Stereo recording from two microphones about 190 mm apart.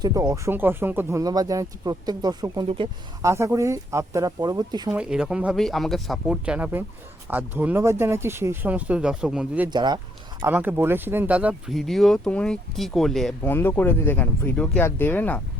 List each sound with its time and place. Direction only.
0.0 s speech: 20° right (ahead or behind)
3.2 s speech: 15° right (ahead or behind)
4.9 s speech: 5° right (ahead or behind)
9.6 s speech: 20° right (ahead or behind)
10.4 s speech: 10° right (ahead or behind); by 15.4 s 10° left (ahead or behind)